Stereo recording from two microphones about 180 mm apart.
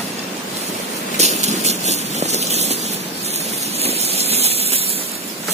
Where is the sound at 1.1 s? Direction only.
40° right (ahead or behind).